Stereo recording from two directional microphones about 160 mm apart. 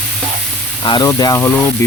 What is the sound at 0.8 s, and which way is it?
Speech, 30° left (ahead or behind).